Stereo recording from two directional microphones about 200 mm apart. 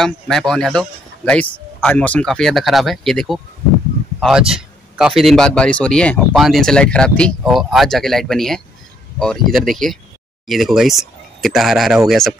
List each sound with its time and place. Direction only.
0.0 s speech: centre (ahead or behind)